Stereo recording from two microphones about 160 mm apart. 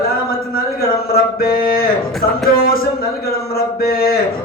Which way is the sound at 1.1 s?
70° left (ahead or behind).